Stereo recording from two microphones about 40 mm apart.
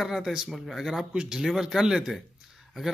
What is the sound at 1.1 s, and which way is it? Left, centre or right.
Speech, right.